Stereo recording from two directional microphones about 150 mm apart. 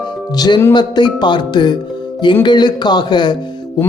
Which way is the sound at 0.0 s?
25° left (ahead or behind).